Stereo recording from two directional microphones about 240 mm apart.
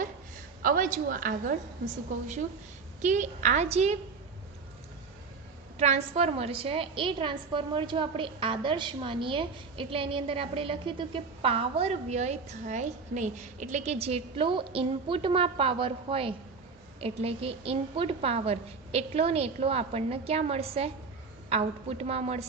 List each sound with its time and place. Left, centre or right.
0.6 s a woman's voice: right
3.0 s a woman's voice: right
5.7 s a woman's voice: right